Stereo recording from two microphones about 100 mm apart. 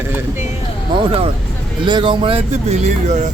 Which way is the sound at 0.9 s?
65° right (ahead or behind).